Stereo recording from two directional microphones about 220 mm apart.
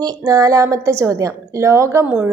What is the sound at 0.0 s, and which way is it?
A woman's voice, 15° right (ahead or behind).